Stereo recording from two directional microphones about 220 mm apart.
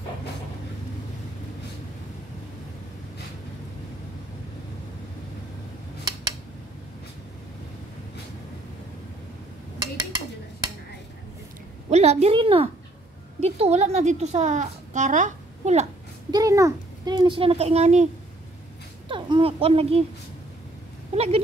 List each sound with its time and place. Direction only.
11.9 s a woman's voice: 30° right (ahead or behind)
16.3 s a child's voice: 15° right (ahead or behind)
19.0 s speech: 20° right (ahead or behind)
21.1 s a sound: 30° right (ahead or behind)